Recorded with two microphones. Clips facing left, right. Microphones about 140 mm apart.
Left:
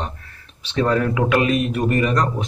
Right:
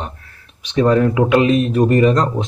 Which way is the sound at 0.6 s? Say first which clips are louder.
Right 5 dB; 15° right (ahead or behind).